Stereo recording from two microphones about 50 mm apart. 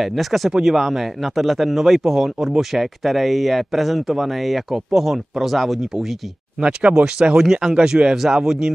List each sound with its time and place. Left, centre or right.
0.0 s speech: centre
0.5 s speech: centre
0.7 s speech: centre
6.6 s speech: right